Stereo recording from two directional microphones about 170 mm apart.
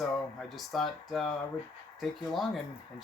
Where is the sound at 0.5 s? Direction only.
Centre (ahead or behind).